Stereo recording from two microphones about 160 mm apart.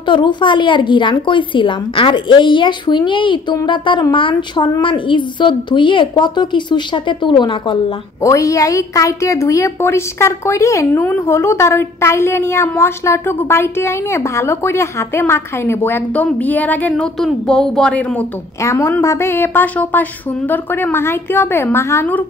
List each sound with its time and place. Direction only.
0.0 s a woman's voice: 30° left (ahead or behind)
8.2 s a woman's voice: 20° left (ahead or behind)
18.6 s a woman's voice: 20° left (ahead or behind)